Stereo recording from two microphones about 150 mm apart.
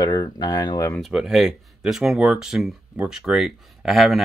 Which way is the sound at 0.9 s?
Centre (ahead or behind).